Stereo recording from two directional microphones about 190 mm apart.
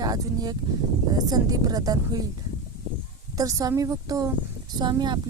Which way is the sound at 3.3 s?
20° right (ahead or behind).